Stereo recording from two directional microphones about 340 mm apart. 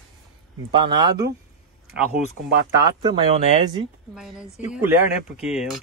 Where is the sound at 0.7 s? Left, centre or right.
Centre.